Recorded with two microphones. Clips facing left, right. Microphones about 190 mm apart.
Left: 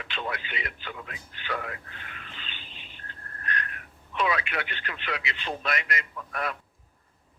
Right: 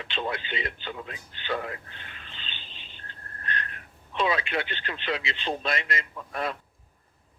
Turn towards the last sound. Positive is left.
turn(degrees=-25)  # may be behind; listen again after turning